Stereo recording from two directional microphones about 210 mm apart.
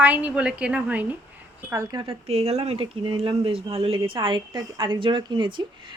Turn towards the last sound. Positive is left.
turn(degrees=-20)  # may be behind; listen again after turning